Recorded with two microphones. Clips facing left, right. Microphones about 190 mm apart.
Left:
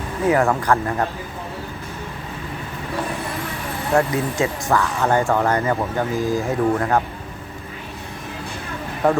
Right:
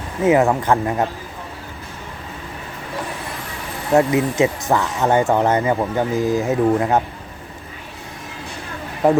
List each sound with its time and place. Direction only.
0.3 s speech: 20° right (ahead or behind)
3.9 s speech: 20° right (ahead or behind)
9.0 s a man's voice: 15° right (ahead or behind)